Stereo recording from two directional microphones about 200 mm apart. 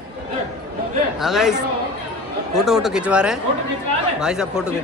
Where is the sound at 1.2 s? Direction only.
Centre (ahead or behind).